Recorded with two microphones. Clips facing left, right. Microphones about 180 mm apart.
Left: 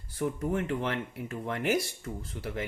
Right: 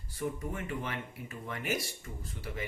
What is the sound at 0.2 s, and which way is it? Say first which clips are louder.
Speech: left 6 dB; 70° left (ahead or behind).